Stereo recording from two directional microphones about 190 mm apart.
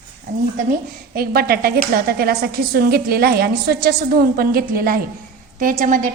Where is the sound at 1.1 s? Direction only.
50° right (ahead or behind).